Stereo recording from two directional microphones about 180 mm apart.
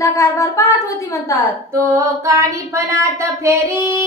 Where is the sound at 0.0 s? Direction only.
15° left (ahead or behind).